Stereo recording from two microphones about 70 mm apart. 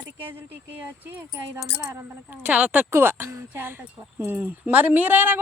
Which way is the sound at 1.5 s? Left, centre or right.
Right.